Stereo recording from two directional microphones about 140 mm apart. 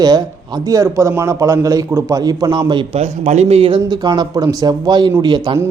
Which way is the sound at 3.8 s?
30° right (ahead or behind).